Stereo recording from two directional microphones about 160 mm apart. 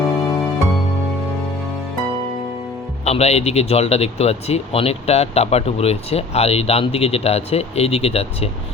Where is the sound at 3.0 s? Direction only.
40° left (ahead or behind).